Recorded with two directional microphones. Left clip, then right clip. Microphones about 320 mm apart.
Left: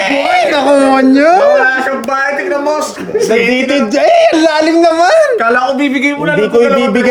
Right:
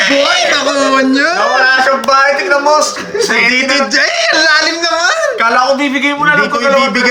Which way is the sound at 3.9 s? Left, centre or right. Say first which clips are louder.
Left 4 dB; centre.